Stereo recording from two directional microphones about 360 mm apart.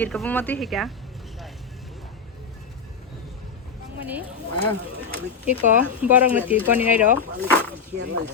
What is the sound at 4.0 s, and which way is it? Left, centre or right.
Speech, centre.